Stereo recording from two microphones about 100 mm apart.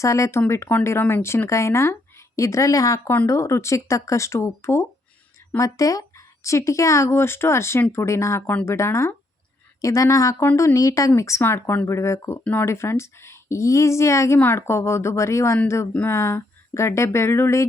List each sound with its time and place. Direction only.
0.0 s speech: 30° left (ahead or behind)
10.5 s speech: 25° left (ahead or behind)
10.8 s speech: 35° left (ahead or behind)
15.9 s speech: 15° left (ahead or behind)
16.1 s speech: 25° left (ahead or behind)